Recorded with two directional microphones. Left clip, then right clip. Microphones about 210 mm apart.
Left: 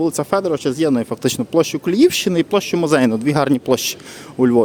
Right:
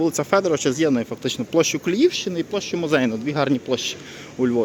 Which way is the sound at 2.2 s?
50° left (ahead or behind).